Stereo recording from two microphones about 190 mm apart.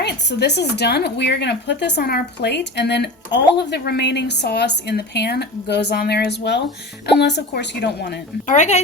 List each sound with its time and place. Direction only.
0.0 s speech: 60° left (ahead or behind)
8.4 s speech: 40° left (ahead or behind)